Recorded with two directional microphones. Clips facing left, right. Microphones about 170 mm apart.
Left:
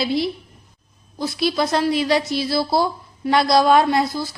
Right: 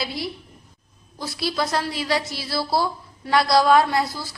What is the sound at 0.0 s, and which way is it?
Speech, 25° left (ahead or behind).